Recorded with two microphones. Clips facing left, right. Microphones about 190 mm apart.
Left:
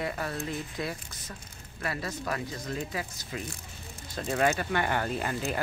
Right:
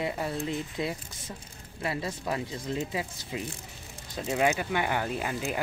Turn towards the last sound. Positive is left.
turn(degrees=-5)  # may be behind; listen again after turning